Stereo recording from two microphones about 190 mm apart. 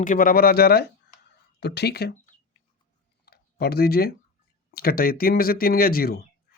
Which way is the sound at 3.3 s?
55° left (ahead or behind).